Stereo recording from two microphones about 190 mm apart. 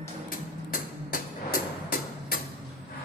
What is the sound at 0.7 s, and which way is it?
Music, 45° left (ahead or behind).